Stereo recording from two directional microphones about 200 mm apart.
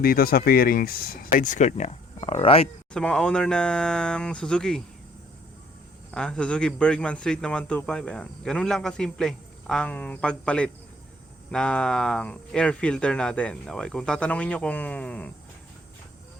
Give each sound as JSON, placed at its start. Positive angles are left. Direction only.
{"t": 0.0, "sound": "speech", "side_deg": 50}
{"t": 2.9, "sound": "a man's voice", "side_deg": 5}
{"t": 6.1, "sound": "a man's voice", "side_deg": 5}